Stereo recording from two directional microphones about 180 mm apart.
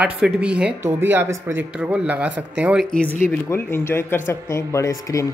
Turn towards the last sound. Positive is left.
turn(degrees=20)  # may be behind; listen again after turning